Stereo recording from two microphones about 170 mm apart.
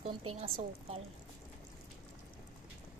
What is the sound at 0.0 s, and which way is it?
A woman's voice, 35° right (ahead or behind).